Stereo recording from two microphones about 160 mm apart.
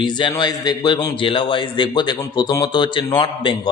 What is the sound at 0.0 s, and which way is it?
A man's voice, 30° left (ahead or behind).